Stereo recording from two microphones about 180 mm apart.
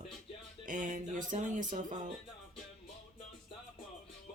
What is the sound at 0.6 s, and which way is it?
Speech, 45° right (ahead or behind).